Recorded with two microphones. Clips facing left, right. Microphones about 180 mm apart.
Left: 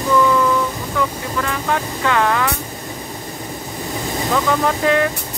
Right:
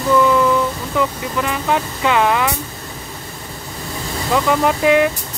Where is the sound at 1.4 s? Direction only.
15° right (ahead or behind).